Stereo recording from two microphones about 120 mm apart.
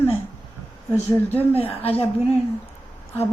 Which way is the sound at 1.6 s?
50° left (ahead or behind).